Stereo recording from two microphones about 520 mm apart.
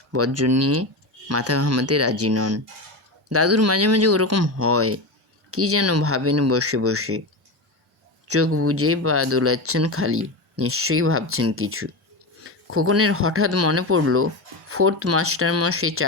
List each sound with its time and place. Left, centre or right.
0.1 s speech: right
8.3 s speech: right